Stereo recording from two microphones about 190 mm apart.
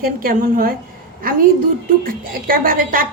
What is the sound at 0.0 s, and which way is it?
A woman's voice, 50° right (ahead or behind).